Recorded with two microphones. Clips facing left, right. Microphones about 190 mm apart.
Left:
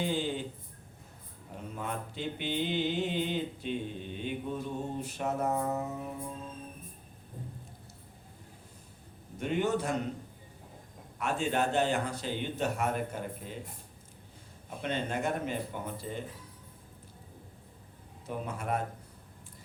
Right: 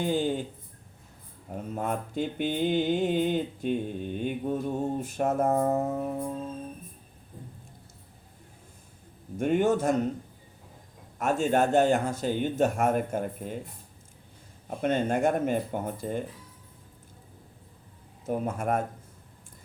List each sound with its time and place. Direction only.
0.0 s speech: 45° right (ahead or behind)
1.7 s speech: 50° right (ahead or behind)
9.4 s speech: 50° right (ahead or behind)
11.2 s speech: 45° right (ahead or behind)
14.8 s speech: 45° right (ahead or behind)
18.3 s speech: 45° right (ahead or behind)